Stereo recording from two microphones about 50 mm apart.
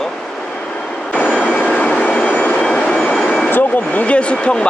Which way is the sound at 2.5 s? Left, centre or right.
Centre.